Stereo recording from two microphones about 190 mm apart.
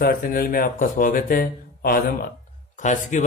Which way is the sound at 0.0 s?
50° left (ahead or behind).